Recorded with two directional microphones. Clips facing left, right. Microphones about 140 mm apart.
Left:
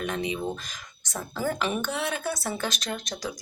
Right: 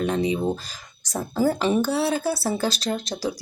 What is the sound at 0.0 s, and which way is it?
Speech, 30° right (ahead or behind).